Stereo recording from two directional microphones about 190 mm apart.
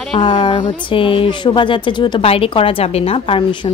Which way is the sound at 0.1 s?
25° left (ahead or behind).